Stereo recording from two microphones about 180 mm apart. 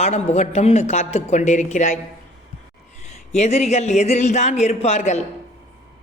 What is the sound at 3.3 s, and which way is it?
Speech, 35° left (ahead or behind).